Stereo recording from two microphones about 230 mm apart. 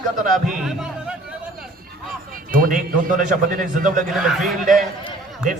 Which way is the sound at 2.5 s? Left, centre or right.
Right.